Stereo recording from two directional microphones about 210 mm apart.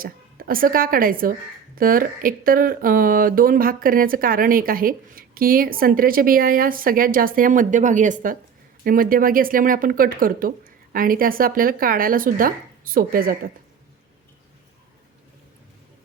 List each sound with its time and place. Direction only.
0.0 s speech: 45° right (ahead or behind)